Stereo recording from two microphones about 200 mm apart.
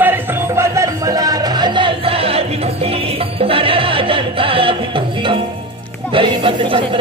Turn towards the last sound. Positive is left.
turn(degrees=-25)  # may be behind; listen again after turning